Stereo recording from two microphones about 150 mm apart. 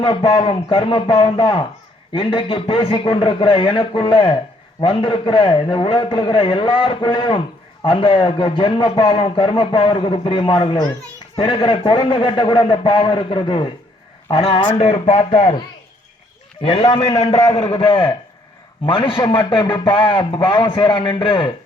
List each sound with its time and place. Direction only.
0.0 s a man's voice: 35° left (ahead or behind)
16.6 s a man's voice: 25° left (ahead or behind)
17.2 s a man's voice: 45° left (ahead or behind)